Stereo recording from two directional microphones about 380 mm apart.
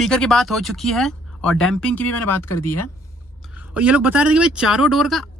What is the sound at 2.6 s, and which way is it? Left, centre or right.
Speech, left.